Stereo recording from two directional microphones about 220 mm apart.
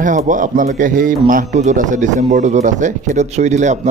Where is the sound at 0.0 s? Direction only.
35° right (ahead or behind).